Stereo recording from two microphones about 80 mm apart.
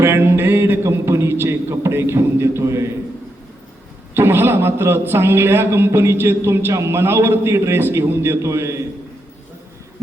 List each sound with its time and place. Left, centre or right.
0.0 s a man's voice: right
4.1 s a man's voice: right